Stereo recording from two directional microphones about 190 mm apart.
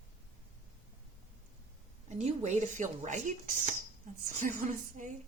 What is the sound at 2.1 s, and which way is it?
Speech, 35° right (ahead or behind).